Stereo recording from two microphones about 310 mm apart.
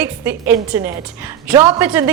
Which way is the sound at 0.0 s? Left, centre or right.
Centre.